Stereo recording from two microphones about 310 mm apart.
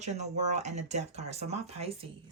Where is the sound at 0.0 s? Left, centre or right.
Right.